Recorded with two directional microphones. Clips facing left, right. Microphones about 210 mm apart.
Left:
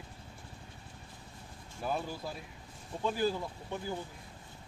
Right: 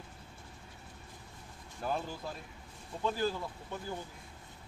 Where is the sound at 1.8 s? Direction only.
10° left (ahead or behind).